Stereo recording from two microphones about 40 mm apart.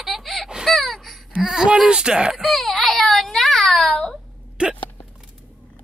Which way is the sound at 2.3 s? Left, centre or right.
Centre.